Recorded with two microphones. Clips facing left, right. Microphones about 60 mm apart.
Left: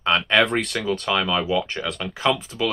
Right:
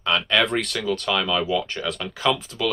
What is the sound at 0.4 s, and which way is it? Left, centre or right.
Speech, centre.